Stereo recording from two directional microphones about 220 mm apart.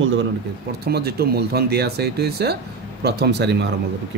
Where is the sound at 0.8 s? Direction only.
45° right (ahead or behind).